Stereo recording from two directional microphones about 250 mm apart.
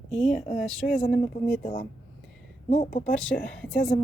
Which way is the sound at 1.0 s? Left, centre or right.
Left.